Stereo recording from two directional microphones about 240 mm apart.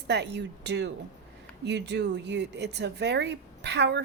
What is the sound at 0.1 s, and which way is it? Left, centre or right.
Speech, right.